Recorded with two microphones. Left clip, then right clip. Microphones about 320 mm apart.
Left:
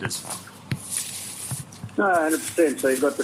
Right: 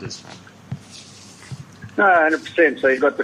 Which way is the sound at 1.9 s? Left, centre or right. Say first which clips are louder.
Right 6 dB; right.